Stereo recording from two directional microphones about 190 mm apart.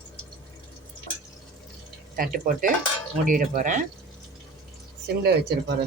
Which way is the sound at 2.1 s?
50° right (ahead or behind).